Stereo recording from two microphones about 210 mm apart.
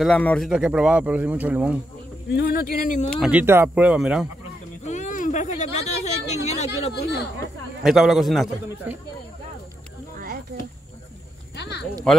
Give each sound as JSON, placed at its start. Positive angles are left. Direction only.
{"t": 0.0, "sound": "speech", "side_deg": 5}
{"t": 2.2, "sound": "speech", "side_deg": 50}
{"t": 3.1, "sound": "speech", "side_deg": -5}
{"t": 4.8, "sound": "speech", "side_deg": 35}
{"t": 7.8, "sound": "speech", "side_deg": 0}
{"t": 10.1, "sound": "a sound", "side_deg": -45}
{"t": 11.5, "sound": "a sound", "side_deg": 55}
{"t": 12.1, "sound": "speech", "side_deg": 5}